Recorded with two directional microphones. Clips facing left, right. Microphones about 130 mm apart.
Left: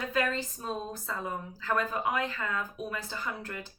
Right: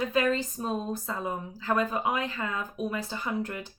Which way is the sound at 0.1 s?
20° right (ahead or behind).